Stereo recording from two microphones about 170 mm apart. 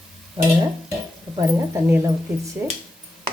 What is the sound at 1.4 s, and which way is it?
Speech, 15° right (ahead or behind).